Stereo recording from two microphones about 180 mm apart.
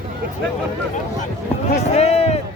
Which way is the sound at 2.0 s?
35° left (ahead or behind).